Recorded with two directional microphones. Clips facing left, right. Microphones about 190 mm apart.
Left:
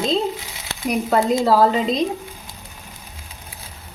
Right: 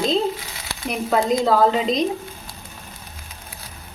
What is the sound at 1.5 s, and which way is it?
Speech, centre (ahead or behind).